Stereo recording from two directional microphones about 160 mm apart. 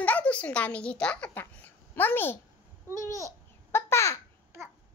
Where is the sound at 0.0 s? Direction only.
10° left (ahead or behind).